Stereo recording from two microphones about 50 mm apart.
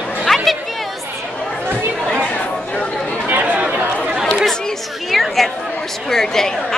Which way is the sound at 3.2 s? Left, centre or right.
Right.